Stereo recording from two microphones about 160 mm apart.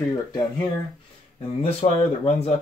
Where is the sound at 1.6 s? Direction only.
40° left (ahead or behind).